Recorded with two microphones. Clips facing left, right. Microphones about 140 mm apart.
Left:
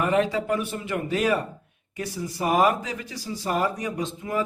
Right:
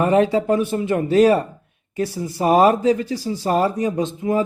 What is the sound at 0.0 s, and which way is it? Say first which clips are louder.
Speech: right 6 dB; 35° right (ahead or behind).